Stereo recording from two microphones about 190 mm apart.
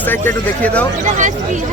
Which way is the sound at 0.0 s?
10° left (ahead or behind).